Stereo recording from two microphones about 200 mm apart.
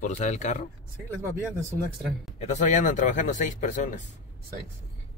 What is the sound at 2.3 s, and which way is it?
Speech, 35° left (ahead or behind).